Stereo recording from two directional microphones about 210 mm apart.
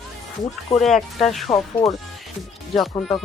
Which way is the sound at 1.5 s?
15° left (ahead or behind).